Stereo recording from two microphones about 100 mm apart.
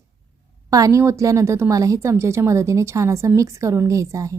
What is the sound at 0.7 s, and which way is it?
Speech, 35° right (ahead or behind).